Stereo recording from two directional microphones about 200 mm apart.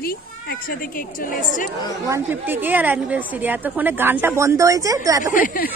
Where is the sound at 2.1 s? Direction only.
10° right (ahead or behind).